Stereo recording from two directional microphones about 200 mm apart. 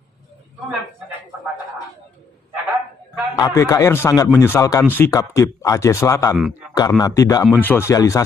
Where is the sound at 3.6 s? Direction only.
15° left (ahead or behind).